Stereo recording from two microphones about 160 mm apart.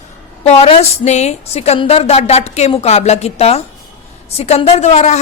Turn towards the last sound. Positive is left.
turn(degrees=45)  # may be behind; listen again after turning